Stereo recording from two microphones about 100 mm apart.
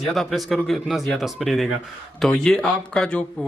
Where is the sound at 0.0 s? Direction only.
Centre (ahead or behind).